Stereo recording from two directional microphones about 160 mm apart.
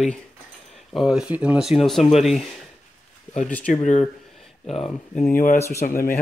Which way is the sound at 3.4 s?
10° left (ahead or behind).